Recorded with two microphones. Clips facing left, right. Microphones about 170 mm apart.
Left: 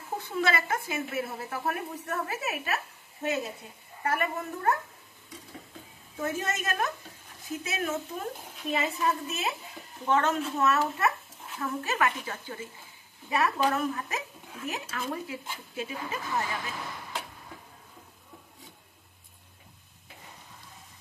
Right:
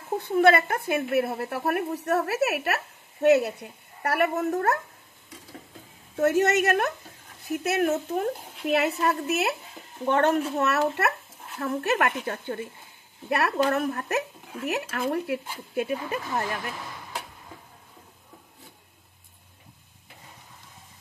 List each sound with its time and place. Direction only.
0.2 s a woman's voice: 60° right (ahead or behind); by 4.7 s 75° right (ahead or behind)
6.1 s a woman's voice: 75° right (ahead or behind)
10.0 s a woman's voice: 65° right (ahead or behind)